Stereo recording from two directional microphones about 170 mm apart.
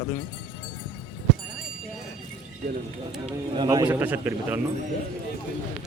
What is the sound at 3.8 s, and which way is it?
Speech, 10° right (ahead or behind).